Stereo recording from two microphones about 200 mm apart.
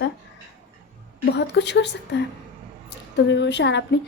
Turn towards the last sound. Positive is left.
turn(degrees=60)  # may be behind; listen again after turning